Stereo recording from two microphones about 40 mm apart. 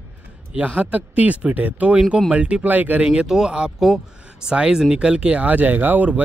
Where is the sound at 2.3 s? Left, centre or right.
Right.